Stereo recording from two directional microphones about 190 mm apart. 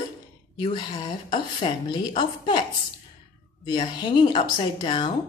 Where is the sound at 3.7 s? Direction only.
25° left (ahead or behind).